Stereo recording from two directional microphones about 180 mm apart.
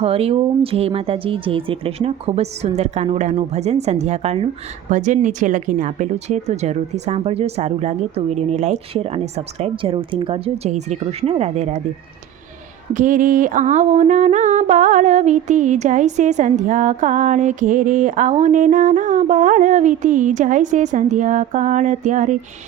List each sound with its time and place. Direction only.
0.0 s speech: 35° right (ahead or behind)
12.9 s mantra: 45° right (ahead or behind)